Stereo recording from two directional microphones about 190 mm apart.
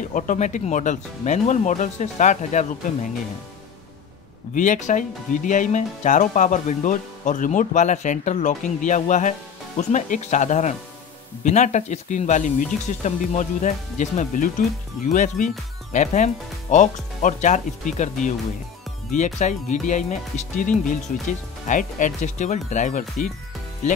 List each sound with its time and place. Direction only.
0.1 s speech: 40° left (ahead or behind)
4.6 s speech: 40° left (ahead or behind)